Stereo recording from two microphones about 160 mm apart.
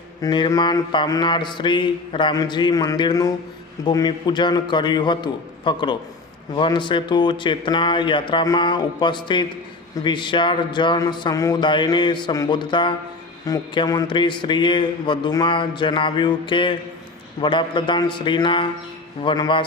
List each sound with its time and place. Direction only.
0.2 s a man's voice: 25° left (ahead or behind)